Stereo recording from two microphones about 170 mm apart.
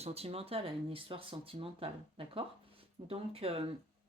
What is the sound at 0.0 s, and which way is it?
Speech, 35° right (ahead or behind).